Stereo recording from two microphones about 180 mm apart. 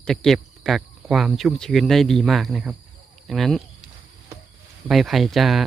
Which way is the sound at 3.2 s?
Centre (ahead or behind).